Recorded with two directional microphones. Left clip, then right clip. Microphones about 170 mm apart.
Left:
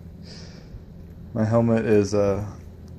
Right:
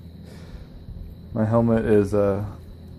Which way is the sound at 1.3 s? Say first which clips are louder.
Even; 5° right (ahead or behind).